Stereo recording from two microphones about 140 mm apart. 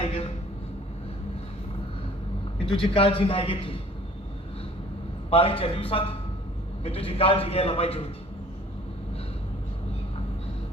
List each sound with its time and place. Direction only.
0.0 s a sound: 50° left (ahead or behind)
2.8 s a man's voice: 40° left (ahead or behind)
5.3 s a man's voice: 40° left (ahead or behind)